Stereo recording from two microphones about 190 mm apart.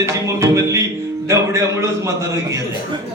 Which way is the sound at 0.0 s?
15° right (ahead or behind).